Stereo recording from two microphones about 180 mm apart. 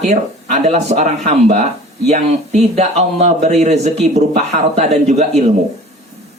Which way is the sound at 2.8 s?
35° right (ahead or behind).